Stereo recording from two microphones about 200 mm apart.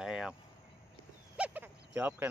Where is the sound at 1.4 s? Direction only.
5° right (ahead or behind).